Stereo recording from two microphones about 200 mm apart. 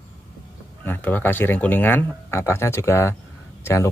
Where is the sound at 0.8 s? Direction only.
10° left (ahead or behind).